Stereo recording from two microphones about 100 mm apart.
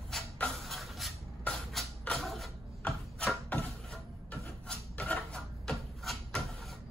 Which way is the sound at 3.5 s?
15° left (ahead or behind).